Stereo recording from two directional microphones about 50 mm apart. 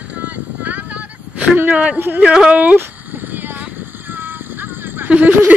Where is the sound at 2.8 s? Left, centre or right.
Right.